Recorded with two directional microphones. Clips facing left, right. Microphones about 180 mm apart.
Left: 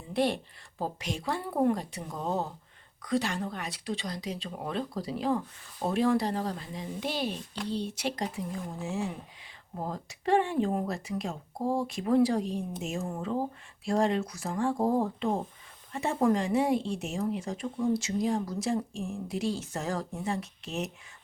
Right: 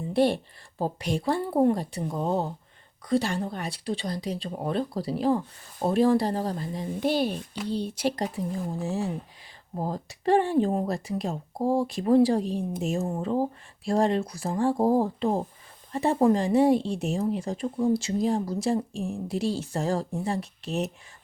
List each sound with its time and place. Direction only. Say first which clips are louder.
0.1 s speech: right 5 dB; 30° right (ahead or behind)
7.2 s speech: right 6 dB; 50° right (ahead or behind)
7.5 s speech: right 3 dB; 10° right (ahead or behind)
7.9 s speech: right 5 dB; 35° right (ahead or behind)
13.8 s speech: right 3 dB; 35° right (ahead or behind)